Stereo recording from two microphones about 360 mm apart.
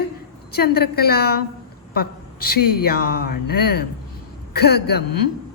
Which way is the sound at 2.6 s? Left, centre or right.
Left.